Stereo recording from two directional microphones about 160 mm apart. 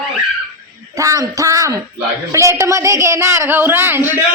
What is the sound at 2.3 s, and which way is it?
Female singing, 15° right (ahead or behind).